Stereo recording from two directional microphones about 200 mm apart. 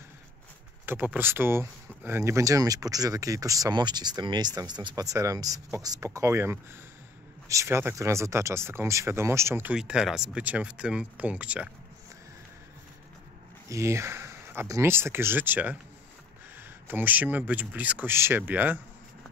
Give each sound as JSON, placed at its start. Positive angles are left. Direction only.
{"t": 0.8, "sound": "speech", "side_deg": -10}
{"t": 13.7, "sound": "speech", "side_deg": -15}